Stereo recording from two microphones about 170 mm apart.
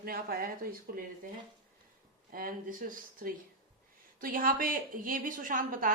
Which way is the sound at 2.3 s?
55° right (ahead or behind).